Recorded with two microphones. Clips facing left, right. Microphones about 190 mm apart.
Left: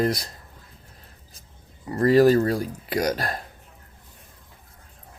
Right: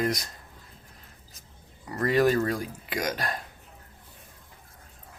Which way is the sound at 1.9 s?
30° left (ahead or behind).